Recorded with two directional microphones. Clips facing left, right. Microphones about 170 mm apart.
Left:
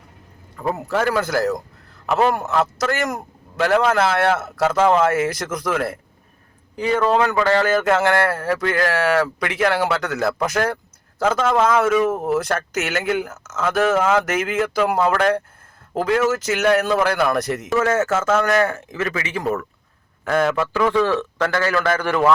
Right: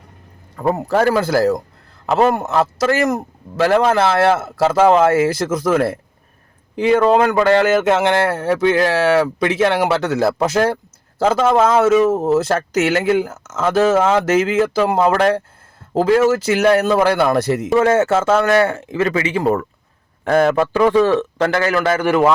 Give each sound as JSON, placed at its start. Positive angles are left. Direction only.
{"t": 0.5, "sound": "speech", "side_deg": -40}
{"t": 7.0, "sound": "speech", "side_deg": -20}
{"t": 20.8, "sound": "a man's voice", "side_deg": -20}